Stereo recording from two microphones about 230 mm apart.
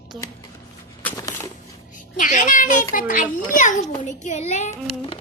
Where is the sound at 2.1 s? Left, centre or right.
Left.